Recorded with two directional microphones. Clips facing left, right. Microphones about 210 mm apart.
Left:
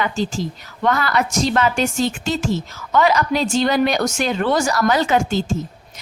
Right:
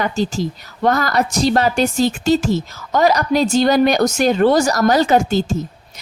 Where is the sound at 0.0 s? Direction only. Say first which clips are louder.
Right 3 dB; 40° right (ahead or behind).